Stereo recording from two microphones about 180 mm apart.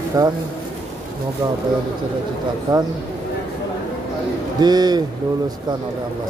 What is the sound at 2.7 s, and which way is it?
Speech, 20° right (ahead or behind).